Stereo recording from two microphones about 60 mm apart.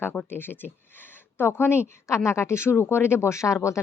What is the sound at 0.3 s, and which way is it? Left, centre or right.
A woman's voice, left.